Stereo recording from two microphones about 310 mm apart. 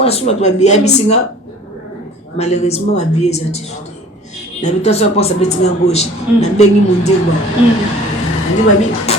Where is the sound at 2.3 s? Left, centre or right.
Left.